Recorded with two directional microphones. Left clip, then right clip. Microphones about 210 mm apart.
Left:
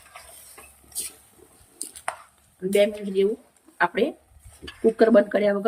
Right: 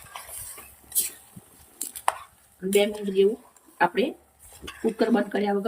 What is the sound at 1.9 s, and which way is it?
Chopping, 10° right (ahead or behind).